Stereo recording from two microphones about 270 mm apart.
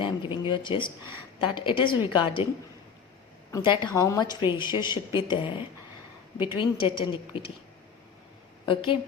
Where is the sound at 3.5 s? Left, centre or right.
Centre.